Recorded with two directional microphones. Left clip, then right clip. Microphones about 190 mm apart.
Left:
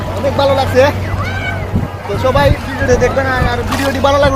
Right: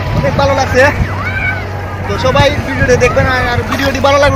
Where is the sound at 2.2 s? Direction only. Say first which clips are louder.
Right 1 dB; 5° right (ahead or behind).